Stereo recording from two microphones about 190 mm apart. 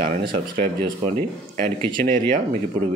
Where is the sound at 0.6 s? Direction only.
50° right (ahead or behind).